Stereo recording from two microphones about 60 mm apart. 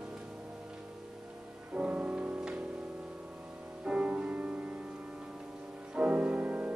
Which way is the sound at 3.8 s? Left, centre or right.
Right.